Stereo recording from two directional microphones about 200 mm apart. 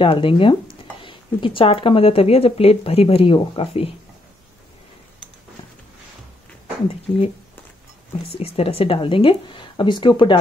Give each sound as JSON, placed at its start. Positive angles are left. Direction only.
{"t": 0.0, "sound": "speech", "side_deg": 25}
{"t": 8.3, "sound": "speech", "side_deg": 30}